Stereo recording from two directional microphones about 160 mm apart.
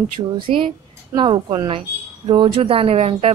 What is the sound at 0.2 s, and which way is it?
A woman's voice, 25° right (ahead or behind).